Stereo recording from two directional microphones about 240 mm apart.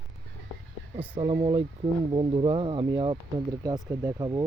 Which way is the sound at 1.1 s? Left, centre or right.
Right.